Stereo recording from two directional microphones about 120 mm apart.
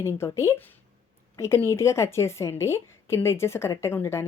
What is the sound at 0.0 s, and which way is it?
A woman's voice, 20° left (ahead or behind).